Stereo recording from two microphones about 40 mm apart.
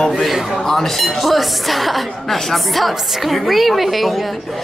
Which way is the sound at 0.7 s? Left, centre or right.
Centre.